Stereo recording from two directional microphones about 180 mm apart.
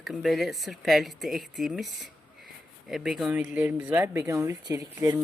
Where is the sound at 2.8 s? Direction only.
Centre (ahead or behind).